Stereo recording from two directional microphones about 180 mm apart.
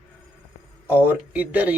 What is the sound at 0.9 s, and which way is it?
Speech, 10° right (ahead or behind).